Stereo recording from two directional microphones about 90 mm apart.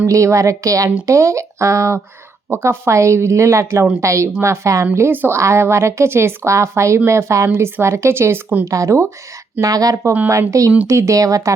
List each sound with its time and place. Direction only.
0.0 s a woman's voice: 35° right (ahead or behind)
4.9 s a woman's voice: 25° right (ahead or behind)
8.6 s a woman's voice: 35° right (ahead or behind)
10.0 s a woman's voice: 25° right (ahead or behind)